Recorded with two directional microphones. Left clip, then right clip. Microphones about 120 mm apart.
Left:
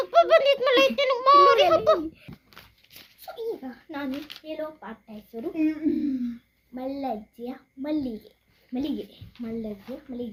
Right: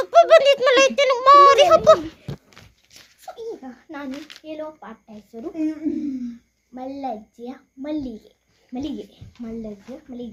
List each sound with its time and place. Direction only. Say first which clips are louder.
0.0 s a child's voice: right 6 dB; 40° right (ahead or behind)
3.2 s a sound: even; 20° left (ahead or behind)
4.1 s speech: even; 10° left (ahead or behind)
4.4 s speech: right 2 dB; 25° left (ahead or behind)